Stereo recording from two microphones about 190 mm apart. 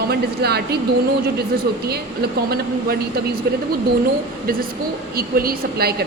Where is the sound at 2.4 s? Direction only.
55° right (ahead or behind).